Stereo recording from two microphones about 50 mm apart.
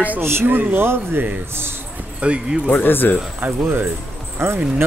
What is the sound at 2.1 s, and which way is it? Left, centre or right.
Speech, right.